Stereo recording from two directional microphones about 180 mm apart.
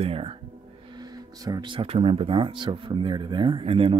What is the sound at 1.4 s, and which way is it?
Speech, 25° right (ahead or behind).